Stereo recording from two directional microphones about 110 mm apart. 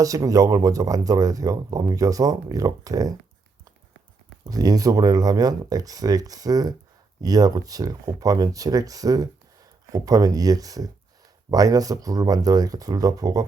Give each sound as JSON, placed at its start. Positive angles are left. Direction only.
{"t": 0.0, "sound": "speech", "side_deg": -30}
{"t": 4.4, "sound": "speech", "side_deg": -35}